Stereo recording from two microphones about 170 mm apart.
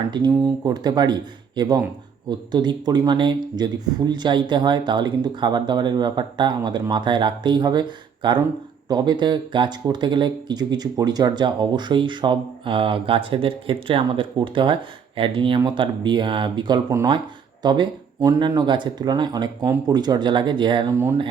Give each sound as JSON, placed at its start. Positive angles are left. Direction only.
{"t": 0.1, "sound": "speech", "side_deg": -25}